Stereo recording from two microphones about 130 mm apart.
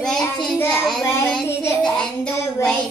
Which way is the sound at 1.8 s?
5° left (ahead or behind).